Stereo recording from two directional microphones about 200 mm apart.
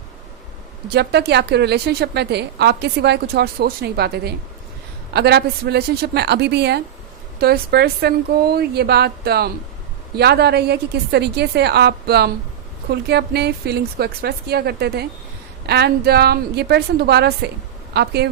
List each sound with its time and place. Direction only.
1.3 s a woman's voice: 55° right (ahead or behind)